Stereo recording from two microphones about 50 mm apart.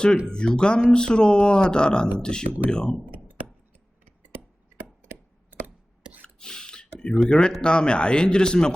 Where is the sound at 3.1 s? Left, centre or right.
Right.